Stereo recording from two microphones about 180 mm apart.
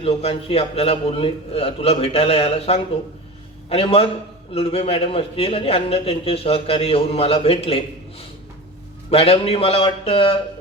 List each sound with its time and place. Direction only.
0.0 s a man's voice: 35° left (ahead or behind)